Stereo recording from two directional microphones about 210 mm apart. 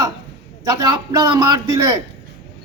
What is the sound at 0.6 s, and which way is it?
Speech, 15° right (ahead or behind).